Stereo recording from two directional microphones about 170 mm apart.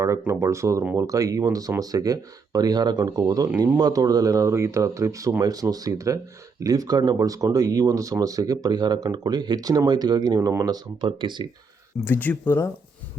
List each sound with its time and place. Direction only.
0.0 s speech: 15° right (ahead or behind)
12.0 s speech: 10° left (ahead or behind)